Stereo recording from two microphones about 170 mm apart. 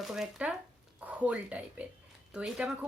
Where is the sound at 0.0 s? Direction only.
5° right (ahead or behind).